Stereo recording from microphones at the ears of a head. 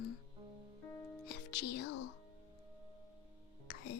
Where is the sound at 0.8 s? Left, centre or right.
Left.